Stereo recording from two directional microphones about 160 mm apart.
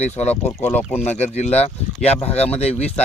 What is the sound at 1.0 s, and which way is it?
Speech, 45° left (ahead or behind).